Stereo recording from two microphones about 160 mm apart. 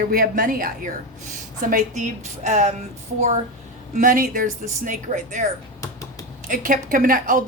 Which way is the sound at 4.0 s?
60° right (ahead or behind).